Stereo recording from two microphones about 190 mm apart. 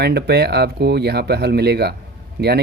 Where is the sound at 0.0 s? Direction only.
60° right (ahead or behind).